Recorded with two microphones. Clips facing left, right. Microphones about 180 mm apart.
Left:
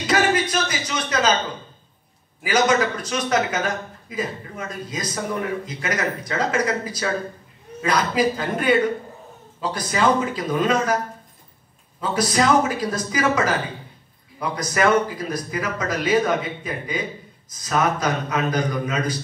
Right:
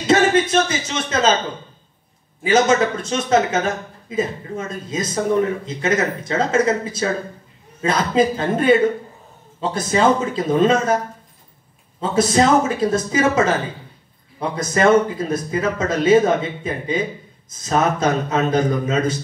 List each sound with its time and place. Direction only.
0.0 s speech: 25° right (ahead or behind)
2.4 s a man's voice: 25° right (ahead or behind)
12.0 s a man's voice: 25° right (ahead or behind)